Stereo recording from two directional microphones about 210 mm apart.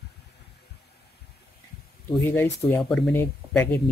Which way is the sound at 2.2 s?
10° left (ahead or behind).